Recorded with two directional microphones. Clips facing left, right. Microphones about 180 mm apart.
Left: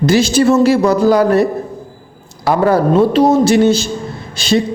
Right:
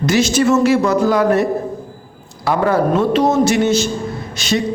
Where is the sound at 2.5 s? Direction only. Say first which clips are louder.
Left 3 dB; 35° left (ahead or behind).